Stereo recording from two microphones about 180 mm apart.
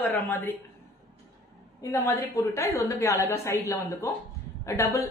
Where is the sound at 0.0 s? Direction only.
10° left (ahead or behind).